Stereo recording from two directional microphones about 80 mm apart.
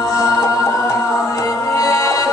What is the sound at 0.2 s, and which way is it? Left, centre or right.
Music, left.